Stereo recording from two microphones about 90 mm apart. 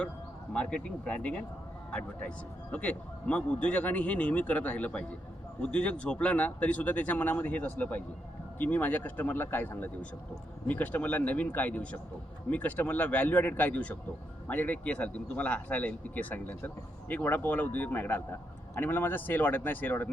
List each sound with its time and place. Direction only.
0.5 s speech: 10° left (ahead or behind)